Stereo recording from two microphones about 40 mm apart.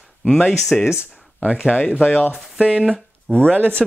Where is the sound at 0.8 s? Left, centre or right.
Right.